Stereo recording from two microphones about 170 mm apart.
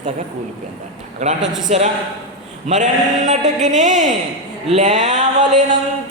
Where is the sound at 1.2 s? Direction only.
45° right (ahead or behind).